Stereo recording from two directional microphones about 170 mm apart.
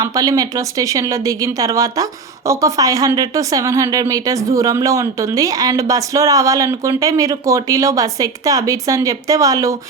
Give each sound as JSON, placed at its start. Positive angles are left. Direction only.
{"t": 0.0, "sound": "speech", "side_deg": -20}